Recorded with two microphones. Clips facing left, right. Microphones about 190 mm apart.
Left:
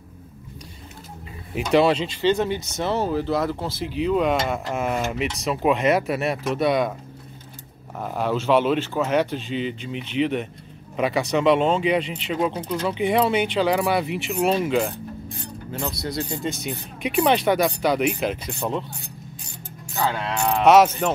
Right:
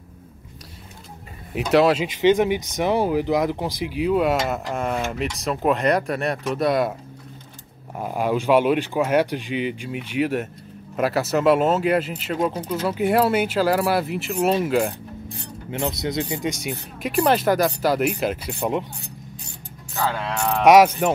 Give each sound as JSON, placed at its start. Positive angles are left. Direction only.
{"t": 1.5, "sound": "speech", "side_deg": 0}
{"t": 2.0, "sound": "speech", "side_deg": -15}
{"t": 8.0, "sound": "speech", "side_deg": -10}
{"t": 15.7, "sound": "speech", "side_deg": -20}
{"t": 17.0, "sound": "speech", "side_deg": 0}
{"t": 20.0, "sound": "speech", "side_deg": 0}
{"t": 20.6, "sound": "speech", "side_deg": -10}